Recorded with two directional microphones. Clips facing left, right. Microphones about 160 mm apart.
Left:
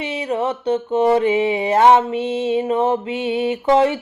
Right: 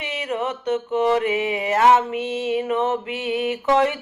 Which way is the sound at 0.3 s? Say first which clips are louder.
Left 4 dB; 30° left (ahead or behind).